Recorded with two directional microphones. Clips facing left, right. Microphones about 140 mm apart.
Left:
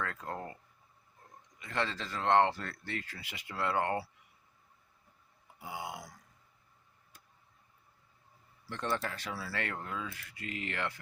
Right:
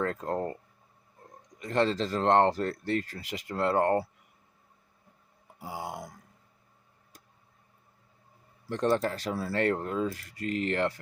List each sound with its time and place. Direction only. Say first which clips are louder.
0.0 s speech: right 9 dB; 35° right (ahead or behind)
5.5 s speech: right 4 dB; 35° right (ahead or behind)
8.6 s speech: right 9 dB; 40° right (ahead or behind)